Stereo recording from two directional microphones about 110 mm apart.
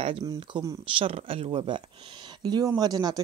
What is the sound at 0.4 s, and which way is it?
Speech, 45° right (ahead or behind).